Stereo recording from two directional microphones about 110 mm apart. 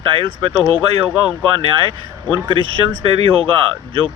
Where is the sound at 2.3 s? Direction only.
50° right (ahead or behind).